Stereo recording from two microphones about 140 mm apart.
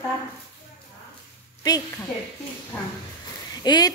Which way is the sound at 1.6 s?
25° left (ahead or behind).